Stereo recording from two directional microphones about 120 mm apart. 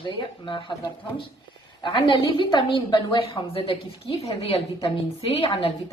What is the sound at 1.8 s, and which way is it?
A woman's voice, 40° left (ahead or behind).